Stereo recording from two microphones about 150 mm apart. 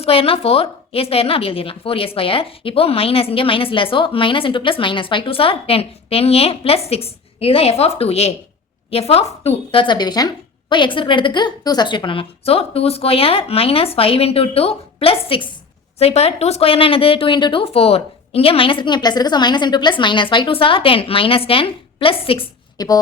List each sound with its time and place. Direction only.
0.0 s a woman's voice: 40° left (ahead or behind)